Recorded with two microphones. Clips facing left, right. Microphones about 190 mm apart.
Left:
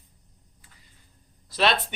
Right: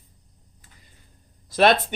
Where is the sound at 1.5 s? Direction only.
50° right (ahead or behind).